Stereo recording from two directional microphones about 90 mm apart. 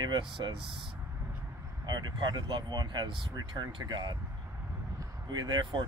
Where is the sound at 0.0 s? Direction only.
60° right (ahead or behind).